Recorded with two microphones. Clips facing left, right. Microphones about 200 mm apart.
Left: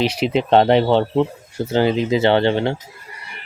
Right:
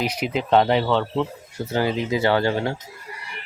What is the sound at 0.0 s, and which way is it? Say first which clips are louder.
Speech: left 6 dB; 30° left (ahead or behind).